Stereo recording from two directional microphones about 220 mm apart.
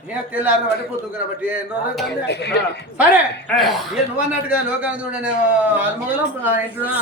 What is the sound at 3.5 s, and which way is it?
A man's voice, centre (ahead or behind).